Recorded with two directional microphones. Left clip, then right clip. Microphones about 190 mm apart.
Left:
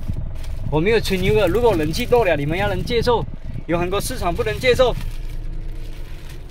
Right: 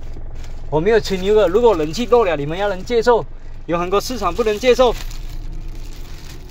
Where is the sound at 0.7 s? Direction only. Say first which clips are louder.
Right 3 dB; 35° left (ahead or behind).